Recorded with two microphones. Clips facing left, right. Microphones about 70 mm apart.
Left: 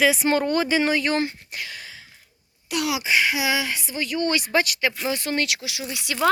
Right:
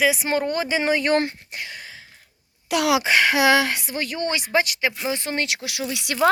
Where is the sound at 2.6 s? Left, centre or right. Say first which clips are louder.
Right 5 dB; right.